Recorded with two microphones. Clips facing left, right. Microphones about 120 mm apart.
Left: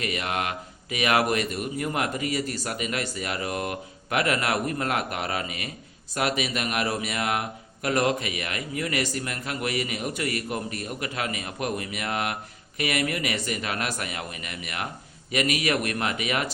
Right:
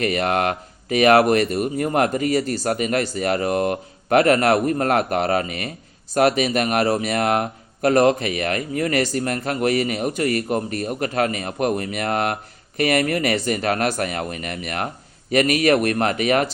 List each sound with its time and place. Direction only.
0.0 s speech: 50° right (ahead or behind)